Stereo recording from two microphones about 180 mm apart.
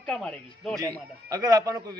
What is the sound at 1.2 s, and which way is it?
Speech, 20° right (ahead or behind).